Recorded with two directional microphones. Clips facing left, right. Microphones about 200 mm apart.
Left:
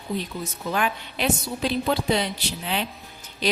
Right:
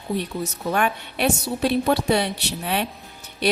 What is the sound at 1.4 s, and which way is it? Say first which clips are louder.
A woman's voice: right 4 dB; 65° right (ahead or behind).